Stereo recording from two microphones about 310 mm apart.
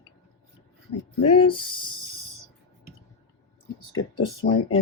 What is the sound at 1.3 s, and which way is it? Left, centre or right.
Speech, centre.